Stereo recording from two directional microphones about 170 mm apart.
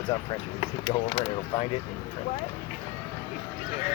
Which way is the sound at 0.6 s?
35° left (ahead or behind).